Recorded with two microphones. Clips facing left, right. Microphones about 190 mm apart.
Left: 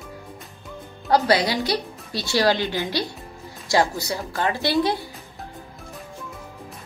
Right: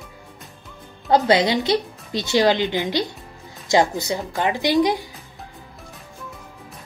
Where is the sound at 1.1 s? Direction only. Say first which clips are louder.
Right 3 dB; 20° right (ahead or behind).